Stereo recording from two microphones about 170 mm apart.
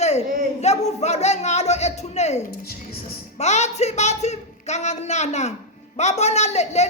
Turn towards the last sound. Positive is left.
turn(degrees=40)  # may be behind; listen again after turning